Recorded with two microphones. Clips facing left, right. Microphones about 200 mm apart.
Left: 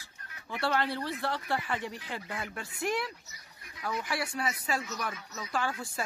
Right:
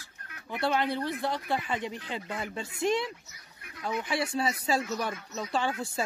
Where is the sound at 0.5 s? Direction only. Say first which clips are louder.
Right 2 dB; 15° right (ahead or behind).